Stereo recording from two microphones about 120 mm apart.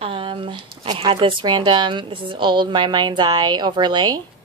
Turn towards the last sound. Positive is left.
turn(degrees=-35)  # may be behind; listen again after turning